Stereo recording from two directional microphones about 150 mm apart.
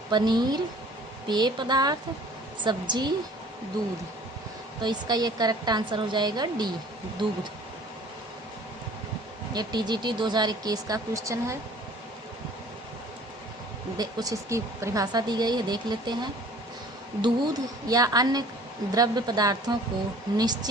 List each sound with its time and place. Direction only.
0.1 s a woman's voice: 30° right (ahead or behind)
4.8 s a woman's voice: 30° right (ahead or behind)
9.5 s a woman's voice: 30° right (ahead or behind)
13.9 s a woman's voice: 25° right (ahead or behind)
17.2 s a woman's voice: 30° right (ahead or behind)